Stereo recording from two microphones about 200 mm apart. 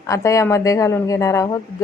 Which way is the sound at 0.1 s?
15° left (ahead or behind).